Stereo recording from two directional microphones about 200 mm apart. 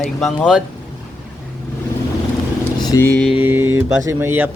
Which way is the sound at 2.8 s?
15° left (ahead or behind).